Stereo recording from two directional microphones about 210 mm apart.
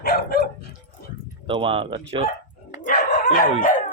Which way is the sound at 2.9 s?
40° left (ahead or behind).